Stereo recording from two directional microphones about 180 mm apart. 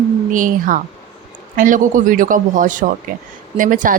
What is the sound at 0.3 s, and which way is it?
Speech, 45° right (ahead or behind).